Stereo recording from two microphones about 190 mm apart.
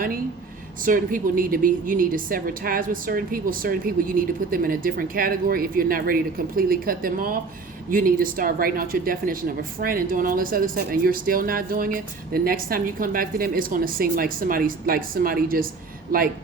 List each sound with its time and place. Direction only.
0.9 s a woman's voice: 45° right (ahead or behind)